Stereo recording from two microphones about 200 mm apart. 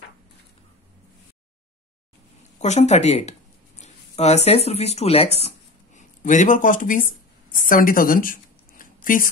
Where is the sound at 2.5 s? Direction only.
35° left (ahead or behind).